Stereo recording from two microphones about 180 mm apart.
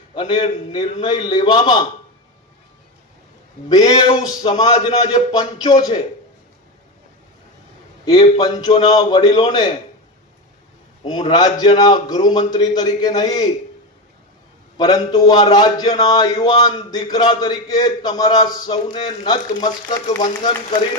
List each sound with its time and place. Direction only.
0.1 s a man's voice: 25° left (ahead or behind)
3.7 s a man's voice: 20° left (ahead or behind)
8.0 s a man's voice: 30° left (ahead or behind)
11.3 s a man's voice: 20° left (ahead or behind)
14.8 s a man's voice: 20° left (ahead or behind)
20.2 s speech: 40° left (ahead or behind)